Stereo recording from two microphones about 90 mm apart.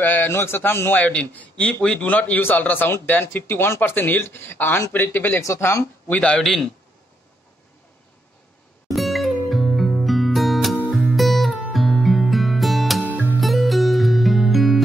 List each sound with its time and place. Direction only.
0.0 s a man's voice: 20° left (ahead or behind)
5.4 s speech: 35° left (ahead or behind)
6.0 s a man's voice: 15° left (ahead or behind)
8.9 s music: centre (ahead or behind)